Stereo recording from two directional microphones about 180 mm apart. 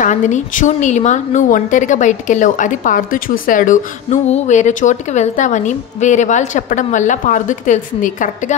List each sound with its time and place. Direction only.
0.0 s a woman's voice: 45° left (ahead or behind)